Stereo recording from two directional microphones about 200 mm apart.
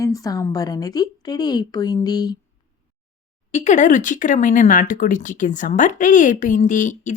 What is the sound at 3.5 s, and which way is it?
Speech, 35° left (ahead or behind).